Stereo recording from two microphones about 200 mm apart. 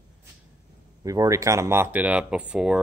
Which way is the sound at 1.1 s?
15° right (ahead or behind).